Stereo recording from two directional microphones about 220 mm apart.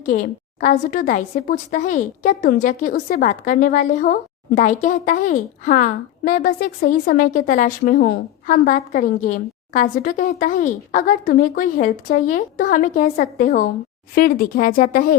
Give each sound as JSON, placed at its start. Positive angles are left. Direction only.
{"t": 0.0, "sound": "a woman's voice", "side_deg": 35}